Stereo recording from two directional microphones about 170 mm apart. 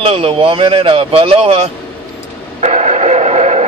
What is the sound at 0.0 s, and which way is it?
Speech, 35° right (ahead or behind).